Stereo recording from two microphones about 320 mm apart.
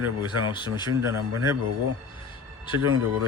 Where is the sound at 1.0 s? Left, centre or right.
Centre.